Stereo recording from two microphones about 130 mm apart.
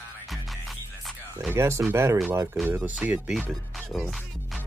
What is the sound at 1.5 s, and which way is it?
Speech, 20° right (ahead or behind).